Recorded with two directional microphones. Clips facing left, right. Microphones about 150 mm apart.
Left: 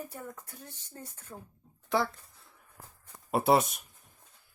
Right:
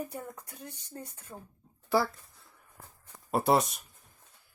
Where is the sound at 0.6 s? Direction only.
10° right (ahead or behind).